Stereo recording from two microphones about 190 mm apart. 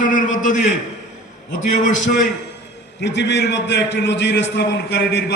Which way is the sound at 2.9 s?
65° left (ahead or behind).